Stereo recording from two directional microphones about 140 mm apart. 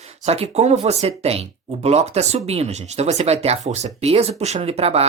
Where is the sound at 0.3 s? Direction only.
50° right (ahead or behind).